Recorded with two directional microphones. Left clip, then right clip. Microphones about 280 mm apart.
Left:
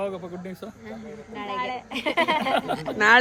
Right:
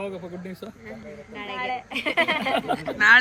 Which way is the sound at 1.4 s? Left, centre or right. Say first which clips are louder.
Even; left.